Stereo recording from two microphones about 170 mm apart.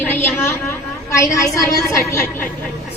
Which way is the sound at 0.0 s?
10° left (ahead or behind).